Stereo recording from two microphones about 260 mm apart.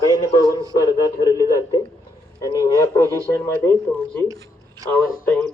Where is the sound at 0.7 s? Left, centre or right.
Centre.